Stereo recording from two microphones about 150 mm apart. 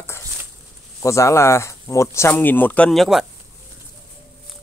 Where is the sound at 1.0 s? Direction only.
20° left (ahead or behind); by 3.3 s centre (ahead or behind).